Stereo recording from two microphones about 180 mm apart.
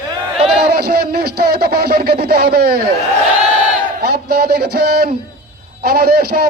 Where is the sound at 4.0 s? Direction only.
60° right (ahead or behind).